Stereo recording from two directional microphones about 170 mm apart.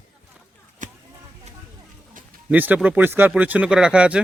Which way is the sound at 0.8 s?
50° right (ahead or behind).